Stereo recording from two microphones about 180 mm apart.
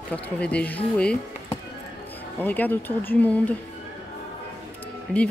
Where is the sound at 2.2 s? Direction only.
10° left (ahead or behind).